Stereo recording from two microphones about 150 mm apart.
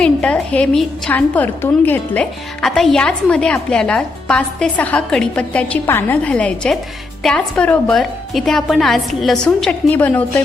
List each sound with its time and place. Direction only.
0.0 s a woman's voice: 5° left (ahead or behind)